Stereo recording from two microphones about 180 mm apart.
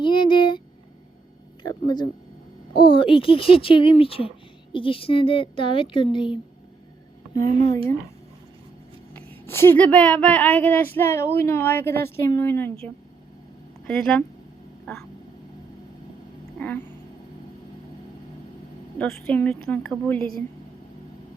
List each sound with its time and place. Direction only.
0.0 s a sound: 25° left (ahead or behind)
1.6 s a woman's voice: 25° left (ahead or behind)
7.3 s speech: 45° right (ahead or behind)
9.1 s speech: 15° left (ahead or behind)
13.8 s a woman's voice: centre (ahead or behind)
16.6 s cat: 10° left (ahead or behind)
18.9 s a woman's voice: 5° left (ahead or behind)